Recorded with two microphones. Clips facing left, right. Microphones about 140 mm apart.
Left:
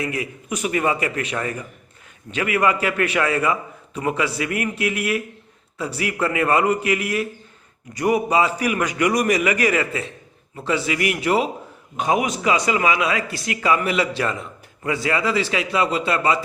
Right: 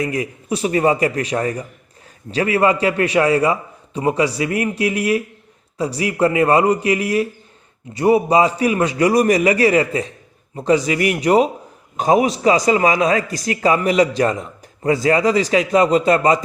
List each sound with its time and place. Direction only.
0.0 s a man's voice: 40° right (ahead or behind)